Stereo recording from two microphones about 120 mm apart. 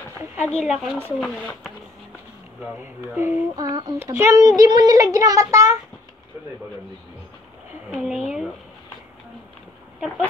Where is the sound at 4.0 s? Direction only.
20° right (ahead or behind).